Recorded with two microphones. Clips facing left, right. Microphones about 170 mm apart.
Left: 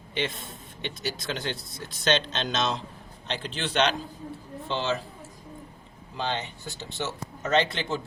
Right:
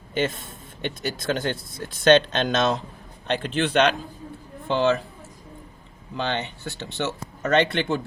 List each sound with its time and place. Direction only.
0.1 s speech: 45° right (ahead or behind)
6.1 s speech: 65° right (ahead or behind)